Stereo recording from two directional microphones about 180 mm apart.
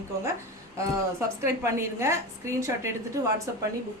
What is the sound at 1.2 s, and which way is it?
A woman's voice, 15° right (ahead or behind).